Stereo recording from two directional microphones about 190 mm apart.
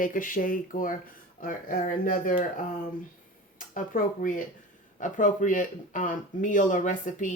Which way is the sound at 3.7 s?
45° left (ahead or behind).